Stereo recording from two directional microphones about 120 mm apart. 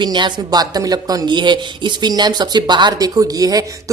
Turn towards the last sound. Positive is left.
turn(degrees=-30)  # may be behind; listen again after turning